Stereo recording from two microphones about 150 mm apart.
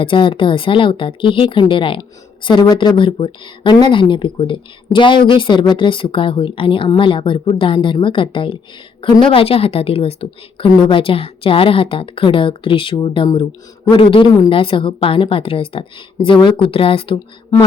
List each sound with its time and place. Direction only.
0.0 s a woman's voice: 35° left (ahead or behind)